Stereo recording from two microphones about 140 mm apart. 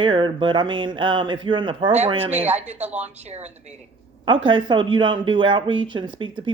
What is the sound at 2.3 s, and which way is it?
Speech, 10° right (ahead or behind).